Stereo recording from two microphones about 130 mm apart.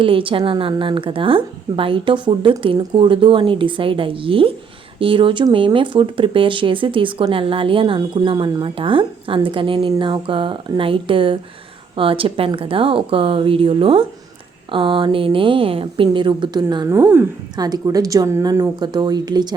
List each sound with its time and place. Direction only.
0.0 s a woman's voice: 40° right (ahead or behind); by 17.2 s 20° right (ahead or behind)
17.6 s speech: 30° right (ahead or behind)